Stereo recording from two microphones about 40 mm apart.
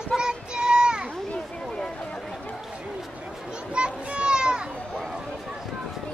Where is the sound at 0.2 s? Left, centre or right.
Centre.